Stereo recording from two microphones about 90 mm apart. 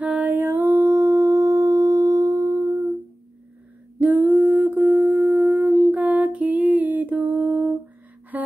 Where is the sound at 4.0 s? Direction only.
20° right (ahead or behind).